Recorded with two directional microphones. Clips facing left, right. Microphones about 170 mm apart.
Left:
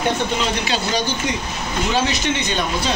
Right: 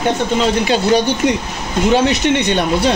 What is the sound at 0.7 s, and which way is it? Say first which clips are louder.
Speech: right 8 dB; 60° right (ahead or behind).